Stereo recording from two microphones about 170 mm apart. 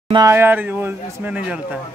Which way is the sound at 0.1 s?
20° right (ahead or behind).